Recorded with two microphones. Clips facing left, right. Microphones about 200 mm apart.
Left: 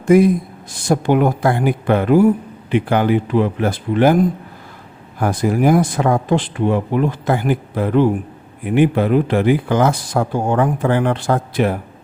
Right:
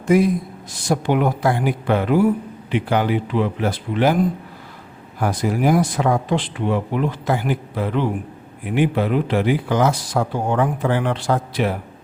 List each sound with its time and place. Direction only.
0.9 s speech: 45° left (ahead or behind)
5.2 s speech: 50° left (ahead or behind)